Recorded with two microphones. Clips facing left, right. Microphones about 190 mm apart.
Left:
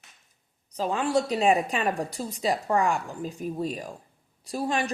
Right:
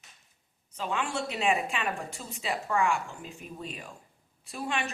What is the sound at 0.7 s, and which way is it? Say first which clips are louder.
A woman's voice: left 7 dB; 35° left (ahead or behind).